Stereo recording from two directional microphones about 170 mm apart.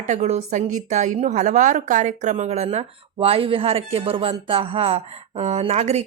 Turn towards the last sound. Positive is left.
turn(degrees=-40)  # may be behind; listen again after turning